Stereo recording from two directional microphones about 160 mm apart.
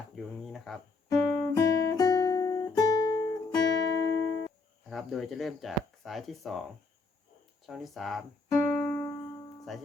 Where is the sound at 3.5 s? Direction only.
25° left (ahead or behind).